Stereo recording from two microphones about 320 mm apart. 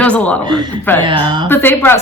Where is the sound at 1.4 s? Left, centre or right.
Centre.